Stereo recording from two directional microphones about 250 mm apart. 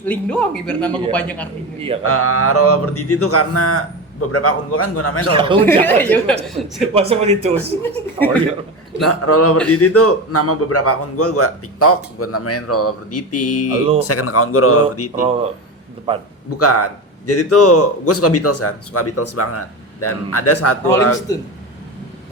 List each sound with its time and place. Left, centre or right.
0.0 s a man's voice: centre
2.0 s a man's voice: left
5.3 s speech: right
5.8 s a man's voice: centre
6.9 s speech: right
7.5 s speech: centre
9.0 s a man's voice: left
13.8 s speech: right
14.1 s a man's voice: left
16.6 s a man's voice: left
20.8 s speech: centre